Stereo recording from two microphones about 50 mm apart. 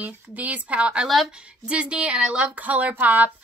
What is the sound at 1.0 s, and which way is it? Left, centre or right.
Speech, centre.